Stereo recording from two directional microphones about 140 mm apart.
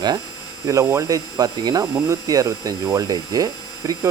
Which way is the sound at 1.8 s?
20° right (ahead or behind).